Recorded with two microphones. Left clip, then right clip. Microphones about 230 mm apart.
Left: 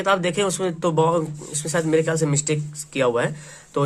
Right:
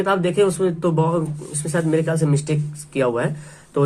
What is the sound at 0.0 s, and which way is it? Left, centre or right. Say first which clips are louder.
A man's voice: right 2 dB; left.